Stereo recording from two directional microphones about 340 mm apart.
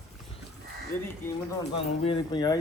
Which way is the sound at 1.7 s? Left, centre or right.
Centre.